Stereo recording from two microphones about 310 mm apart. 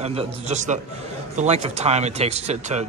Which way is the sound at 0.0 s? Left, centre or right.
Centre.